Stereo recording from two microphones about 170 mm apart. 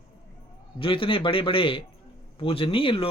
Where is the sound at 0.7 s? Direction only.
30° left (ahead or behind).